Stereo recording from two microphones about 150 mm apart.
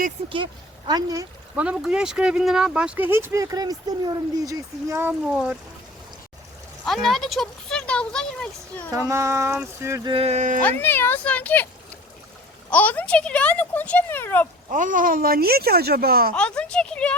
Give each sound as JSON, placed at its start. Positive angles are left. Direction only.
{"t": 0.9, "sound": "speech", "side_deg": -25}
{"t": 1.5, "sound": "speech", "side_deg": -5}
{"t": 6.8, "sound": "speech", "side_deg": 0}
{"t": 8.9, "sound": "speech", "side_deg": -20}
{"t": 10.1, "sound": "speech", "side_deg": -40}
{"t": 10.6, "sound": "speech", "side_deg": 15}
{"t": 12.7, "sound": "speech", "side_deg": 10}
{"t": 14.7, "sound": "speech", "side_deg": -60}
{"t": 16.3, "sound": "speech", "side_deg": 5}